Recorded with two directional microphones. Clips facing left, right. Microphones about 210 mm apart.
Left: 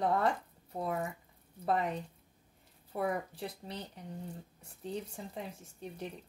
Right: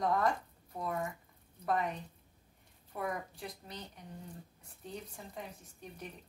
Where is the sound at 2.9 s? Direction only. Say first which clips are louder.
Left 4 dB; 30° left (ahead or behind).